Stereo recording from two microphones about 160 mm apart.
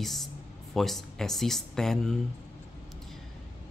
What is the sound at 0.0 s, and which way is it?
Speech, centre (ahead or behind).